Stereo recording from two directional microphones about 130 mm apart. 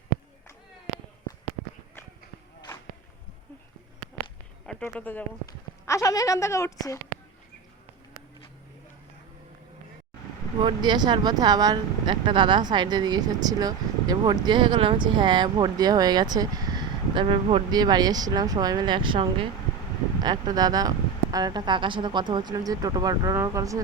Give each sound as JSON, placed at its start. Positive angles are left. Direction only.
{"t": 4.6, "sound": "speech", "side_deg": 5}
{"t": 5.8, "sound": "a woman's voice", "side_deg": 25}
{"t": 10.6, "sound": "speech", "side_deg": -35}
{"t": 17.7, "sound": "speech", "side_deg": -30}